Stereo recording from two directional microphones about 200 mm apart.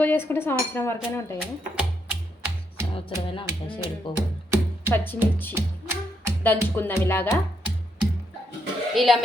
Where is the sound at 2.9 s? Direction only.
25° left (ahead or behind).